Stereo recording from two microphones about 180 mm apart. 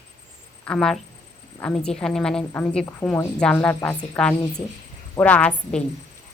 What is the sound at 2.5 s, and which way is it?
A woman's voice, 5° left (ahead or behind).